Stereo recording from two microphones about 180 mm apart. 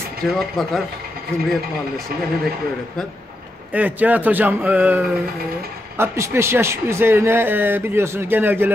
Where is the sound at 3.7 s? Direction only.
10° right (ahead or behind).